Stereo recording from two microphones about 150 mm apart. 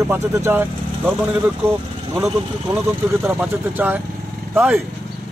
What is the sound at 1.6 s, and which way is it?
A man's voice, 10° right (ahead or behind).